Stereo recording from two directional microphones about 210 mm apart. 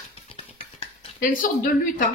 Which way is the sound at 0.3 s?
25° left (ahead or behind).